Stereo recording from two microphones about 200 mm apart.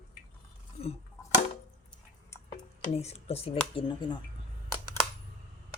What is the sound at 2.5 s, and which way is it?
Speech, 30° left (ahead or behind).